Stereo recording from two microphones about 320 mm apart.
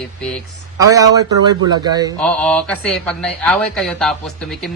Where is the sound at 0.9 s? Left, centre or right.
Centre.